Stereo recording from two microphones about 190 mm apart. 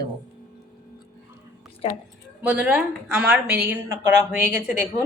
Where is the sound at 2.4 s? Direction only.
5° right (ahead or behind).